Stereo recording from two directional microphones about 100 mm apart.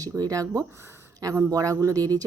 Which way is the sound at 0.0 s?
35° right (ahead or behind).